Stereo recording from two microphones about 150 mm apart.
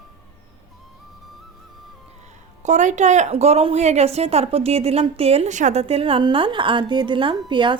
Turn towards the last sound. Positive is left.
turn(degrees=-30)  # may be behind; listen again after turning